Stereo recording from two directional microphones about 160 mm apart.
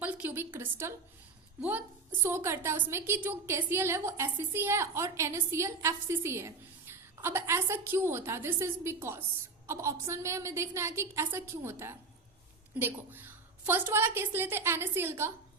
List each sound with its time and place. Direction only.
0.0 s a woman's voice: 10° right (ahead or behind)
2.2 s a woman's voice: 15° right (ahead or behind)